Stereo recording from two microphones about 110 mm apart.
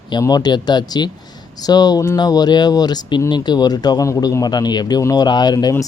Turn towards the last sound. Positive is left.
turn(degrees=35)  # may be behind; listen again after turning